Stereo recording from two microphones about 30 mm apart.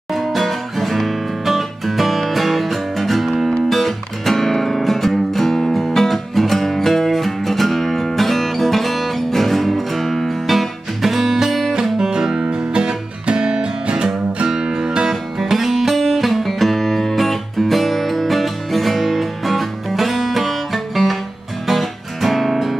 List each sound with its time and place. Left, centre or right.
0.1 s music: centre
11.7 s music: right
12.4 s music: right
14.6 s music: right; by 22.8 s centre